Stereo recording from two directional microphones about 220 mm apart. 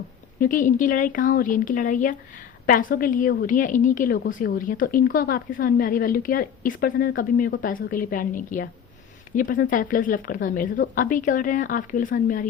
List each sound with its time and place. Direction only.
0.3 s a woman's voice: 40° left (ahead or behind)